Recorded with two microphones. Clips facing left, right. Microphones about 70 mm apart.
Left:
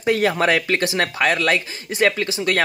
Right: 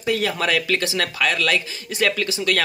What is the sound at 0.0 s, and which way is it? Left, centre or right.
Speech, left.